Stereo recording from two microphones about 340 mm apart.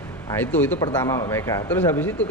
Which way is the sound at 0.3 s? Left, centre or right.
Centre.